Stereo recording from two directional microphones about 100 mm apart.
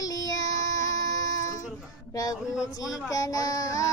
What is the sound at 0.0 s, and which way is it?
Child singing, 35° left (ahead or behind).